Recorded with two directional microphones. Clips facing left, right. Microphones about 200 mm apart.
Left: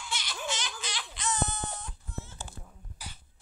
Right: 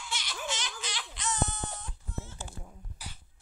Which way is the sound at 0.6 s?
35° left (ahead or behind).